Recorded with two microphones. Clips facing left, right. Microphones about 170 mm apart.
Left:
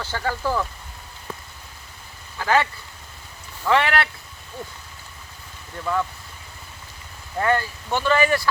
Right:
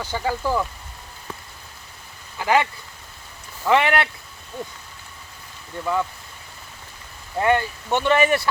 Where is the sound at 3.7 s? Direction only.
20° right (ahead or behind).